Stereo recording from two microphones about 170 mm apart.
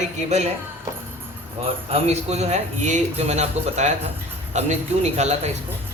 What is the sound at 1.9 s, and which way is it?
A man's voice, 35° right (ahead or behind).